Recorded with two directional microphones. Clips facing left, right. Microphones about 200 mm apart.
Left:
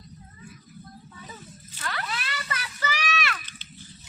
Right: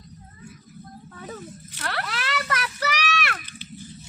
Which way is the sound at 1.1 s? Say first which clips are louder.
Right 11 dB; 60° right (ahead or behind).